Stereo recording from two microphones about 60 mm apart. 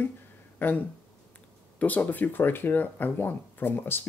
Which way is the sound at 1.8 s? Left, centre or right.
Left.